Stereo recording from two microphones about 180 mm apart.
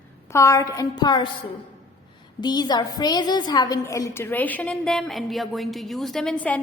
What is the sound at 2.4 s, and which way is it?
A woman's voice, 25° left (ahead or behind).